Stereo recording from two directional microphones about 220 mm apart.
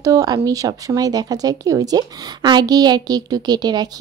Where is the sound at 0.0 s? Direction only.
15° right (ahead or behind).